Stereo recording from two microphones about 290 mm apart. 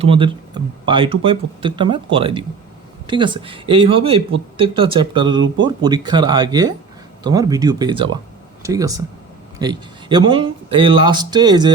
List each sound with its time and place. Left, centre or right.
0.0 s speech: centre